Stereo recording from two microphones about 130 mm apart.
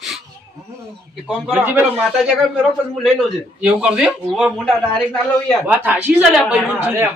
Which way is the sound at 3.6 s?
5° right (ahead or behind).